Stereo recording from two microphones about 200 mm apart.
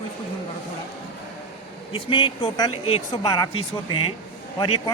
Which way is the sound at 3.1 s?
15° left (ahead or behind).